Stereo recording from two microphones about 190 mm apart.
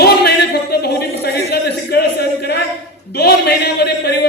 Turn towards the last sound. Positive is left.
turn(degrees=60)  # may be behind; listen again after turning